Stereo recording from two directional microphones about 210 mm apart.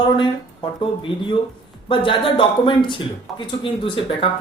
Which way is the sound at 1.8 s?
25° left (ahead or behind).